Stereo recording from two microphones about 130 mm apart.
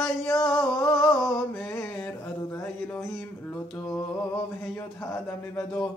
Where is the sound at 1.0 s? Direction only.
10° left (ahead or behind).